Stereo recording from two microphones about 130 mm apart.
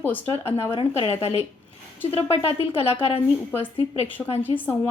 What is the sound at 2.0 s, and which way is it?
Speech, 20° left (ahead or behind).